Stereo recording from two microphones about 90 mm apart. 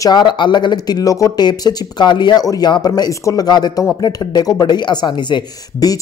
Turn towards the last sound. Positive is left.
turn(degrees=50)  # may be behind; listen again after turning